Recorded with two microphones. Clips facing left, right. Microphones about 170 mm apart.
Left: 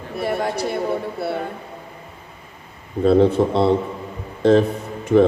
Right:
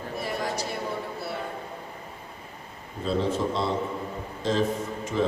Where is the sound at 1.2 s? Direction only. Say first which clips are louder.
Left 9 dB; 60° left (ahead or behind).